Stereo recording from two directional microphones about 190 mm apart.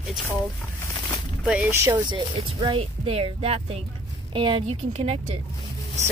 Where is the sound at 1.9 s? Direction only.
25° right (ahead or behind).